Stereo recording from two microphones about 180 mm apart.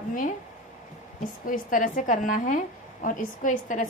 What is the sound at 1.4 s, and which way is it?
A woman's voice, 50° left (ahead or behind).